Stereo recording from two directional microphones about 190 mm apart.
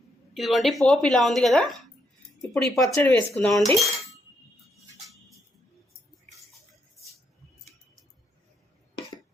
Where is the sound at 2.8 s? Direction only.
10° left (ahead or behind).